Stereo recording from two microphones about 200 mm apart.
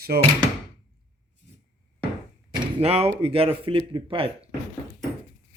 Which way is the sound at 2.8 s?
30° right (ahead or behind).